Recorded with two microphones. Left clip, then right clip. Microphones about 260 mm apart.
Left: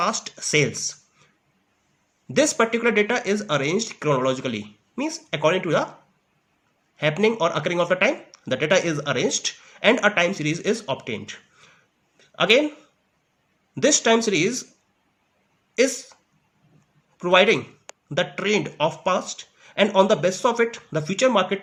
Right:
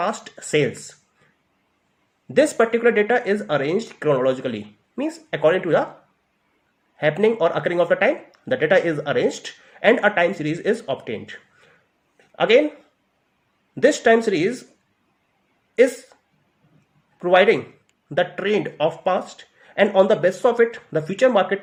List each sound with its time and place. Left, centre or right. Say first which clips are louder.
0.3 s speech: right 1 dB; left
2.3 s speech: right 3 dB; left
6.9 s speech: right 2 dB; left
13.7 s speech: right 3 dB; left
17.2 s speech: right 2 dB; left